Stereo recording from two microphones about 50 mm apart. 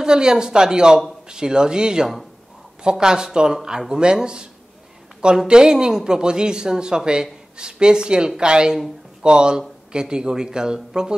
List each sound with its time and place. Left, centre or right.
0.0 s speech: centre